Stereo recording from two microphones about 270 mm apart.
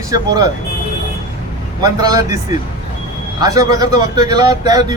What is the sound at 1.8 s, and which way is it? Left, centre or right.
Speech, centre.